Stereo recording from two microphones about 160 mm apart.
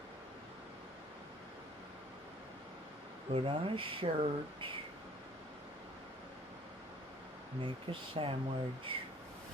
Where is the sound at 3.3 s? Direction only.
35° right (ahead or behind).